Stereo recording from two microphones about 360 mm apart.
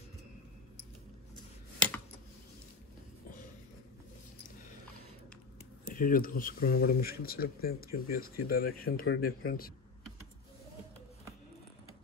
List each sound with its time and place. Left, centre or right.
5.9 s speech: left